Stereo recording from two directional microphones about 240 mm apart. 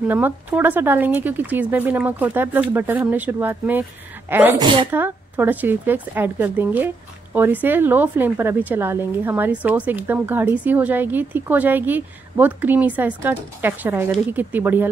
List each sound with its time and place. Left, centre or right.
0.0 s a woman's voice: centre